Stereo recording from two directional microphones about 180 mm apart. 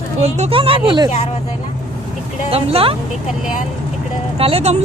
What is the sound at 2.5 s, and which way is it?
Speech, 35° right (ahead or behind).